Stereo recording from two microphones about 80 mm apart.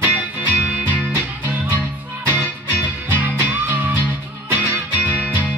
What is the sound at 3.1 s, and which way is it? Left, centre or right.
Music, right.